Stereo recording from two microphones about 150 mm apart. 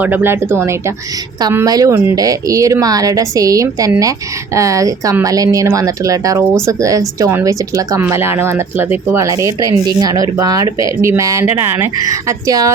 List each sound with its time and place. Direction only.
0.0 s speech: 15° right (ahead or behind)